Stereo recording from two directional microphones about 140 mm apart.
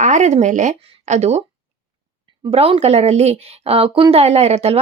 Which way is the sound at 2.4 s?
40° right (ahead or behind).